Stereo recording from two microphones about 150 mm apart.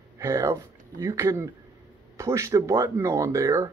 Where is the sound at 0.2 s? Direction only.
15° right (ahead or behind).